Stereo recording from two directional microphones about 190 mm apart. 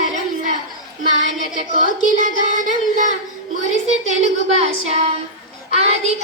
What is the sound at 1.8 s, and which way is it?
Speech, 40° right (ahead or behind).